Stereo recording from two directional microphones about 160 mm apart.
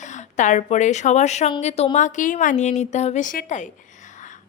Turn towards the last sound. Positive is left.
turn(degrees=50)  # may be behind; listen again after turning